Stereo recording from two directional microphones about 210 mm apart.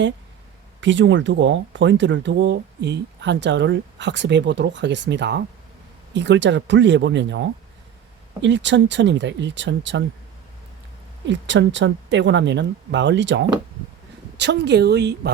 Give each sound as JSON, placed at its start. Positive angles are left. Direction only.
{"t": 0.8, "sound": "speech", "side_deg": -60}
{"t": 11.3, "sound": "speech", "side_deg": -60}